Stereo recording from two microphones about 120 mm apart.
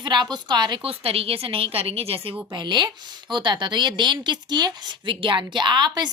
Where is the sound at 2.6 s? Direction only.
40° right (ahead or behind).